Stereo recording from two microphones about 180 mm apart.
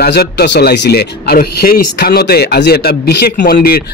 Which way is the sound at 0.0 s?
60° left (ahead or behind).